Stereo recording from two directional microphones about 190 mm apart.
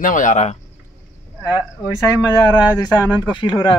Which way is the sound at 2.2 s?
20° left (ahead or behind).